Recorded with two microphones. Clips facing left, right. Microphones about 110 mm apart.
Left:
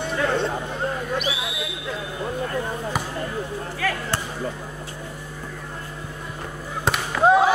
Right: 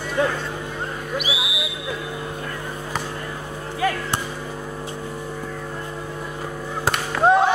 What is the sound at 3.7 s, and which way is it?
Basketball bounce, 20° right (ahead or behind).